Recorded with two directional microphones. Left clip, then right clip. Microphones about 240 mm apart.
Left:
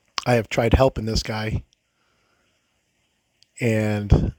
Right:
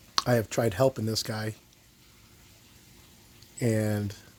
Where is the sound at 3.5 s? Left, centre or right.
Left.